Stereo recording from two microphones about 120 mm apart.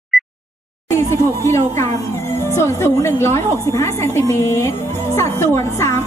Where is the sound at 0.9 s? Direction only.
20° left (ahead or behind).